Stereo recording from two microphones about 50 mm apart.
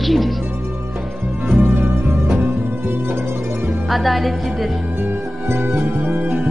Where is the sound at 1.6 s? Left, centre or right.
Right.